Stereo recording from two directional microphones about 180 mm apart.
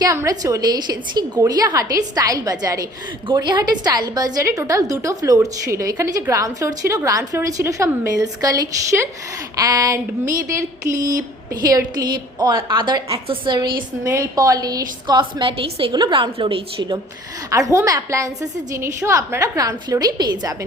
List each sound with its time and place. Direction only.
0.0 s speech: 20° right (ahead or behind)
17.5 s a woman's voice: 15° right (ahead or behind)